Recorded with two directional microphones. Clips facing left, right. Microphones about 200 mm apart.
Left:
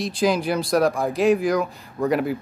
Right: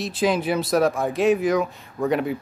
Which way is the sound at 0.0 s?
Centre (ahead or behind).